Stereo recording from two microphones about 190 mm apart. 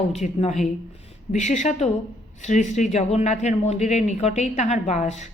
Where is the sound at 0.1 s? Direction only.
35° left (ahead or behind).